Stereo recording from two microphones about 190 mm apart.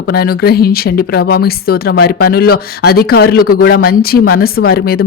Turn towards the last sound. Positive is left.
turn(degrees=55)  # may be behind; listen again after turning